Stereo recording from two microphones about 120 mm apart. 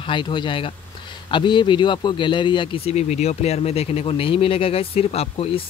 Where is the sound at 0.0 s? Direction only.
40° left (ahead or behind).